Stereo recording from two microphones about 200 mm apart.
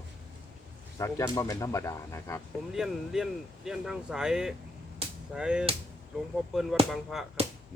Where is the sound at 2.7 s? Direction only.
Centre (ahead or behind).